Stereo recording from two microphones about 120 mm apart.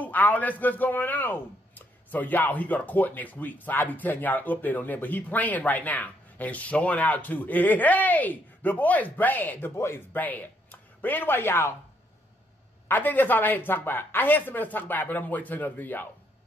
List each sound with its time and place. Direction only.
0.0 s a man's voice: 15° left (ahead or behind)
12.8 s a man's voice: 15° left (ahead or behind)